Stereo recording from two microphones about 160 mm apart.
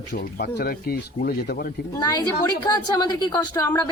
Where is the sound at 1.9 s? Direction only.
25° left (ahead or behind).